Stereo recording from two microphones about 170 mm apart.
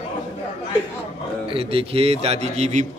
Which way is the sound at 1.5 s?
35° right (ahead or behind).